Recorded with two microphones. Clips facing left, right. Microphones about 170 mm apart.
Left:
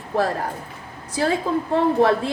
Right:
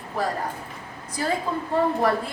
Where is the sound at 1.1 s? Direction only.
75° left (ahead or behind).